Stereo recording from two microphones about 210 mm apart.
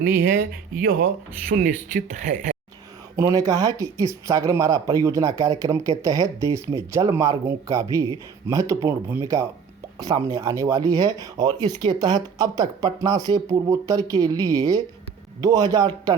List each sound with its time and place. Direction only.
0.2 s speech: 45° right (ahead or behind)
3.2 s speech: 15° right (ahead or behind)